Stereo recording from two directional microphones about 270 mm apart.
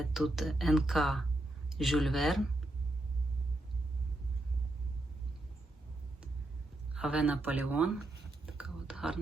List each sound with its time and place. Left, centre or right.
0.0 s speech: centre
6.9 s speech: centre
8.5 s whispering: centre